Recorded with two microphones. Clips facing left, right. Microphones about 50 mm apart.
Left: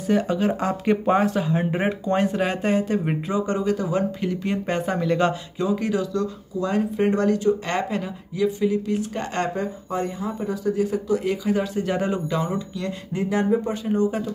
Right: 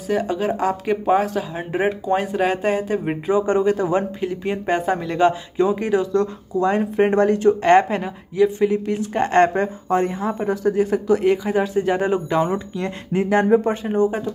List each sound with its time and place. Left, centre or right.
0.1 s speech: centre
3.3 s speech: right
4.4 s speech: centre
5.6 s speech: right
11.2 s speech: right
13.1 s speech: right
13.8 s speech: right